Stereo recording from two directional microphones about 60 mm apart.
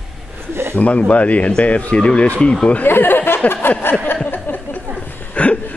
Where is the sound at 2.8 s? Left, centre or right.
Left.